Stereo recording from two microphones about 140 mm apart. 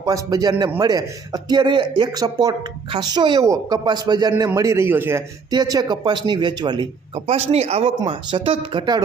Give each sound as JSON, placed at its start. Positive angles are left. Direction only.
{"t": 0.0, "sound": "speech", "side_deg": -25}
{"t": 5.5, "sound": "speech", "side_deg": -30}
{"t": 7.3, "sound": "speech", "side_deg": -45}